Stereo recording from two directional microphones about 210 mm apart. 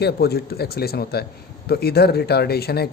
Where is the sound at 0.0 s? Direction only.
50° left (ahead or behind).